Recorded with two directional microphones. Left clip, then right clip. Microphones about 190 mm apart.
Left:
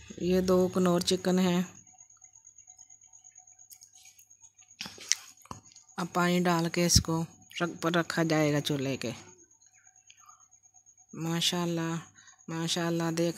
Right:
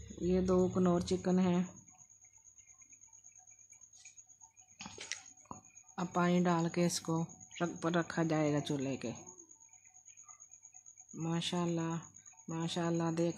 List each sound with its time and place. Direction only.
0.2 s speech: 20° left (ahead or behind)
4.8 s chewing: 5° left (ahead or behind)
5.1 s speech: 15° left (ahead or behind)
11.1 s speech: 15° left (ahead or behind)